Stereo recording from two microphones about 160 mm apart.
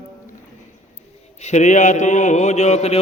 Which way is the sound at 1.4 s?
45° left (ahead or behind).